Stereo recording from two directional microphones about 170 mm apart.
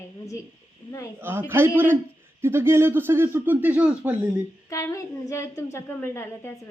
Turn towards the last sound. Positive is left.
turn(degrees=15)  # may be behind; listen again after turning